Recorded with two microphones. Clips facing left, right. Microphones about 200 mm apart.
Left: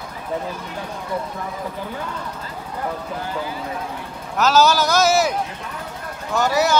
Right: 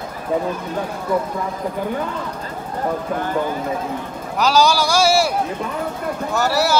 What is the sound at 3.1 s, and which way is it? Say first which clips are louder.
Speech: right 6 dB; 55° right (ahead or behind).